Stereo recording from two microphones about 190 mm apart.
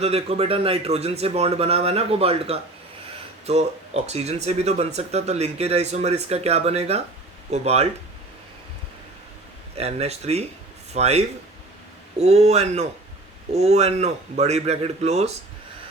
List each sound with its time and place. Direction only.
0.0 s speech: 35° right (ahead or behind)
9.7 s speech: 35° right (ahead or behind)